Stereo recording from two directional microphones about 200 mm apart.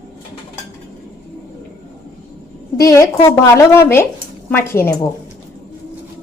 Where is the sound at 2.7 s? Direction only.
15° left (ahead or behind).